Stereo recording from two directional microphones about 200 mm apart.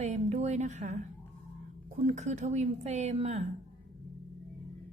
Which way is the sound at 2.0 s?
35° right (ahead or behind).